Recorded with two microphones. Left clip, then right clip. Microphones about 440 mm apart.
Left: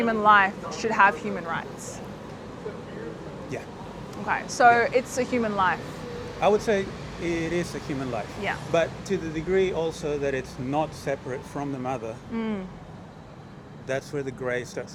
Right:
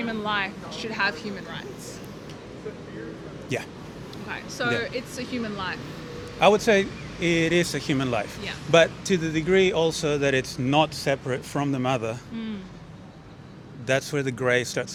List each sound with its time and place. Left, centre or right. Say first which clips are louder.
0.1 s speech: left 11 dB; centre
4.3 s speech: left 9 dB; centre
6.4 s speech: right 4 dB; right
13.8 s speech: right 5 dB; right